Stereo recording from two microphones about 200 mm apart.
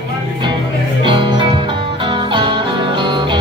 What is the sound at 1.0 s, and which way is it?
Music, 25° right (ahead or behind).